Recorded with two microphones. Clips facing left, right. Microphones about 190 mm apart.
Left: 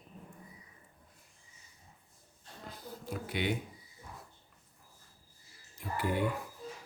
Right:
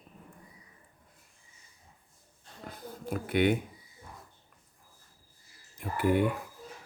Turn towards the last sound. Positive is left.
turn(degrees=-55)  # may be behind; listen again after turning